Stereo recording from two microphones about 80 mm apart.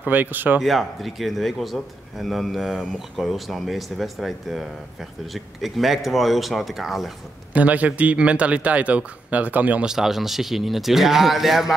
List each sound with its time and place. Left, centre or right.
0.0 s speech: right
0.6 s speech: centre
7.5 s a man's voice: centre
9.8 s speech: centre